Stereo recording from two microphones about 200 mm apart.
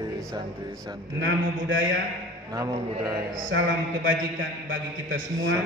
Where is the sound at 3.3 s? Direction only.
70° right (ahead or behind).